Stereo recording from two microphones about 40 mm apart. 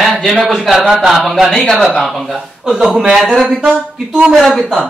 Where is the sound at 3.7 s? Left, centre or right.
Right.